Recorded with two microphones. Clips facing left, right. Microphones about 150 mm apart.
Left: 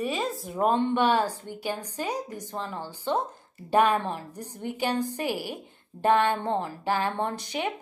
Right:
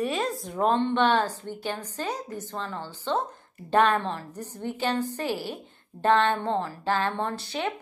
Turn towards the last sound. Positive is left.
turn(degrees=15)  # may be behind; listen again after turning